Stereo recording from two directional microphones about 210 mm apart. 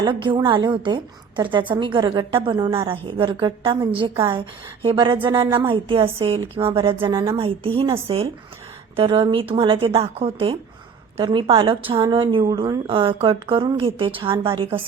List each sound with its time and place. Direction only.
0.0 s speech: 25° right (ahead or behind)